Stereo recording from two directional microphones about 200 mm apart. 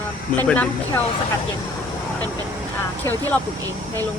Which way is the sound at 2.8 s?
10° left (ahead or behind).